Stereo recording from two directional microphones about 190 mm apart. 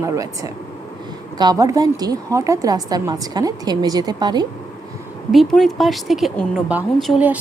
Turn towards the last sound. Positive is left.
turn(degrees=-5)  # may be behind; listen again after turning